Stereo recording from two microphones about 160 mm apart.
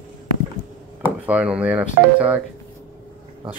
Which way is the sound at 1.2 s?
10° right (ahead or behind).